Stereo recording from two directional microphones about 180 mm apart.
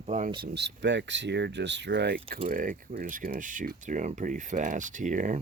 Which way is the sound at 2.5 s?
50° right (ahead or behind).